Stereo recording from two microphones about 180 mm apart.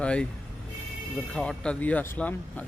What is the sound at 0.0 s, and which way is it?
Speech, 5° left (ahead or behind).